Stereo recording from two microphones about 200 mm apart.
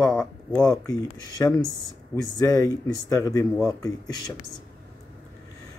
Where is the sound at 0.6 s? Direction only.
20° left (ahead or behind).